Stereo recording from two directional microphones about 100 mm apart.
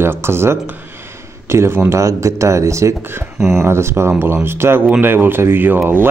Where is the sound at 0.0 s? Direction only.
25° right (ahead or behind).